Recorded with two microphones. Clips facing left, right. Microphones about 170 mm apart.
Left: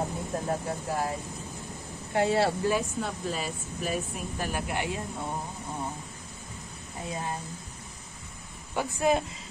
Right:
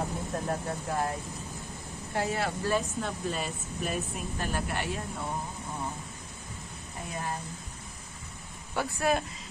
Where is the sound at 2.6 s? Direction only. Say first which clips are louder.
Left 2 dB; 5° left (ahead or behind).